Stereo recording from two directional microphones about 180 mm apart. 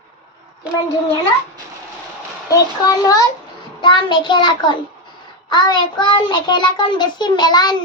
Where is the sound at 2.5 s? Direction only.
20° left (ahead or behind).